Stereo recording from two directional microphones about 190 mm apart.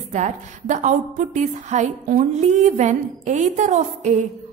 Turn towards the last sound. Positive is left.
turn(degrees=-40)  # may be behind; listen again after turning